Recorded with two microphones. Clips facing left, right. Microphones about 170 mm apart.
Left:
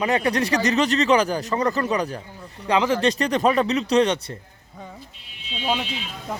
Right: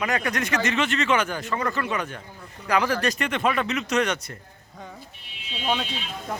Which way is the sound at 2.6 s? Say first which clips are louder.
Left 3 dB; 25° left (ahead or behind).